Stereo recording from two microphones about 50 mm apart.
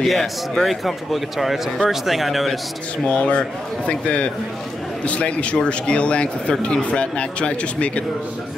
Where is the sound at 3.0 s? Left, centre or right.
Left.